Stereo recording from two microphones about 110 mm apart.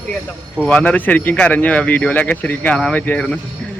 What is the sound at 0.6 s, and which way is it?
Speech, 10° left (ahead or behind).